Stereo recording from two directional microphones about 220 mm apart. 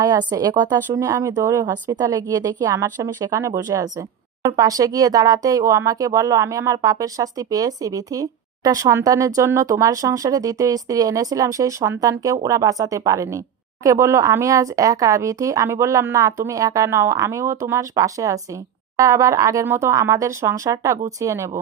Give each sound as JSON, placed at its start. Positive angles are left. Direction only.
{"t": 0.0, "sound": "speech", "side_deg": -20}